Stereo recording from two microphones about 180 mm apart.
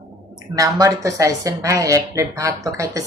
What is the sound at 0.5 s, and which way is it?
A woman's voice, 20° right (ahead or behind).